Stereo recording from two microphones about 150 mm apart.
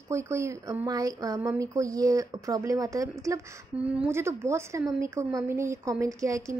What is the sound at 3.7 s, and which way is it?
A woman's voice, 10° right (ahead or behind).